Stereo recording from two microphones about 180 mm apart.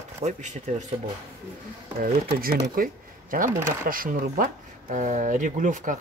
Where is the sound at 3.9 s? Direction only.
50° right (ahead or behind).